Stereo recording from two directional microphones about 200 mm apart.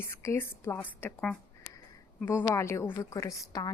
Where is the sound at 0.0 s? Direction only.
10° left (ahead or behind).